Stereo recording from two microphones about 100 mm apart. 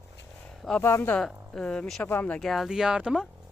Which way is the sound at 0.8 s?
25° left (ahead or behind).